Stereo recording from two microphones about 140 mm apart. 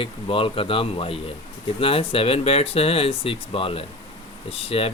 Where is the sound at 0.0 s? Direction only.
40° left (ahead or behind).